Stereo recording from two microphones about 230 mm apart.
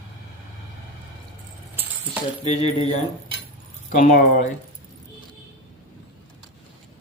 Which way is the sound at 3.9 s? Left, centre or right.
Left.